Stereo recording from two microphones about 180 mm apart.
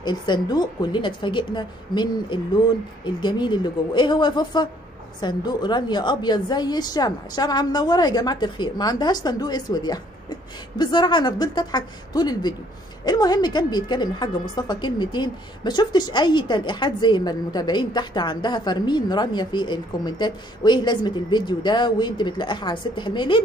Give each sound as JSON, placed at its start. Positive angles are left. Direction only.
{"t": 0.0, "sound": "a woman's voice", "side_deg": 25}